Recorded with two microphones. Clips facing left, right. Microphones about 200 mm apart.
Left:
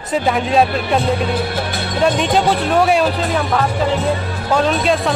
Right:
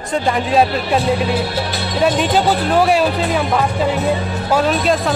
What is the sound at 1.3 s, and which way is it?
Music, 50° left (ahead or behind).